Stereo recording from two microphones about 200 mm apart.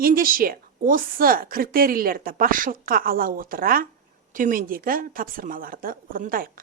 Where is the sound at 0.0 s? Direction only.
45° right (ahead or behind).